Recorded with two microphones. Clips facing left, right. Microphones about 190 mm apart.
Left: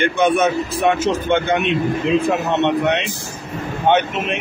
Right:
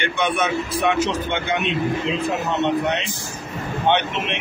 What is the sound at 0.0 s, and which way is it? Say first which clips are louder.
Speech: left 6 dB; 40° left (ahead or behind).